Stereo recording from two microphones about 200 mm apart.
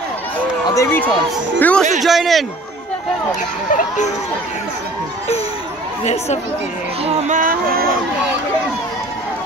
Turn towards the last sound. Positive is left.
turn(degrees=-45)  # may be behind; listen again after turning